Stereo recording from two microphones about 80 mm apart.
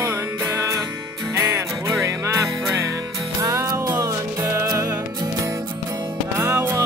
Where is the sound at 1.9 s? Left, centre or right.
Right.